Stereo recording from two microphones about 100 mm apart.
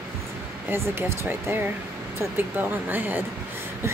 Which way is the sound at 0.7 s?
25° right (ahead or behind).